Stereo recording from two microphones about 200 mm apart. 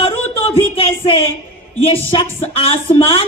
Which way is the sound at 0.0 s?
30° left (ahead or behind).